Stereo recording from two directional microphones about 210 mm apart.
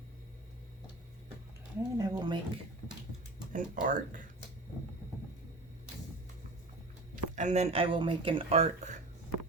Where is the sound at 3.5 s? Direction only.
40° right (ahead or behind).